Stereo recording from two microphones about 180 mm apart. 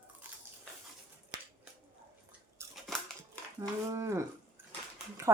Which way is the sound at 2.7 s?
5° left (ahead or behind).